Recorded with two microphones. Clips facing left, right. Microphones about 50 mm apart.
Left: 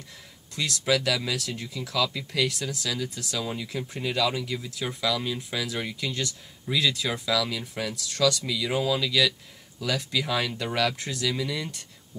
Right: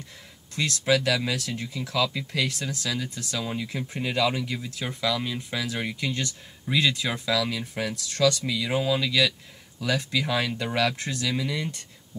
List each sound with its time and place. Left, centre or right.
0.6 s speech: centre